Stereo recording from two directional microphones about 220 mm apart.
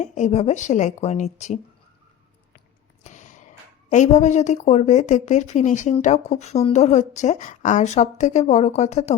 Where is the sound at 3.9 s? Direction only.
35° left (ahead or behind).